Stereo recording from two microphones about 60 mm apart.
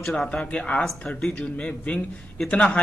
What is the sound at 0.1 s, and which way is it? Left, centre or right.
A man's voice, centre.